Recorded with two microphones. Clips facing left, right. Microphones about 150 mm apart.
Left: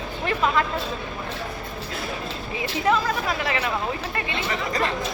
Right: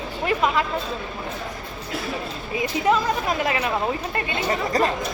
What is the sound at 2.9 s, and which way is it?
Chatter, 15° right (ahead or behind).